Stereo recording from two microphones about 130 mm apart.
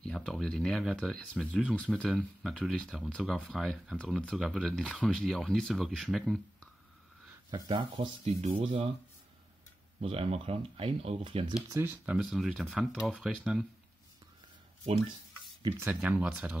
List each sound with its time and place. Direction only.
0.0 s speech: 5° left (ahead or behind)
7.5 s speech: 35° right (ahead or behind)
8.3 s speech: 55° right (ahead or behind)
9.9 s speech: 50° right (ahead or behind)
11.7 s speech: 15° right (ahead or behind)
12.2 s speech: 5° right (ahead or behind)
15.8 s speech: 10° right (ahead or behind)